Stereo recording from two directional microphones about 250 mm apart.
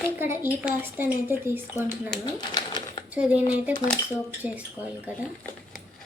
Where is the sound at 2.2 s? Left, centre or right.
Centre.